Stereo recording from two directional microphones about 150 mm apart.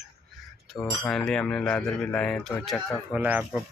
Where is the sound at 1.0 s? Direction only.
5° left (ahead or behind).